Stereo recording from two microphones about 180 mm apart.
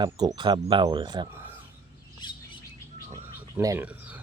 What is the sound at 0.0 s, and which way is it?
Speech, 25° right (ahead or behind).